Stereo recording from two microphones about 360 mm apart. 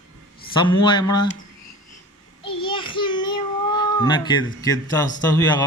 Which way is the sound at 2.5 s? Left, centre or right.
Centre.